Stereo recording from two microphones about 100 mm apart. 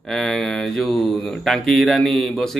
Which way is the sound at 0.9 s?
15° left (ahead or behind).